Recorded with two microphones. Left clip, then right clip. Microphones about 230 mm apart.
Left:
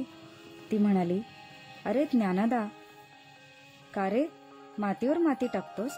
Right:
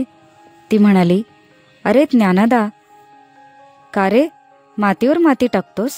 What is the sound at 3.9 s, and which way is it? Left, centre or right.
Speech, right.